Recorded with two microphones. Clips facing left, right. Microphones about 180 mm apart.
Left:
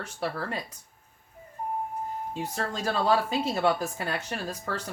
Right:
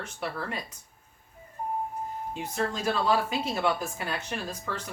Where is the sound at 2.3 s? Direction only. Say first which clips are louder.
Right 3 dB; 35° left (ahead or behind).